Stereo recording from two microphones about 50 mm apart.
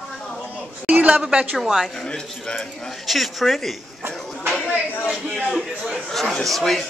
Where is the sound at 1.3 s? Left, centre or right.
Right.